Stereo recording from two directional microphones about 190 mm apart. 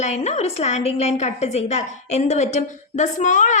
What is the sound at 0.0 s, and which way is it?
A woman's voice, 35° left (ahead or behind).